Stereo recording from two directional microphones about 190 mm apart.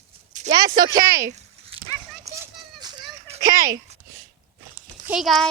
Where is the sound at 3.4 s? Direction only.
20° right (ahead or behind).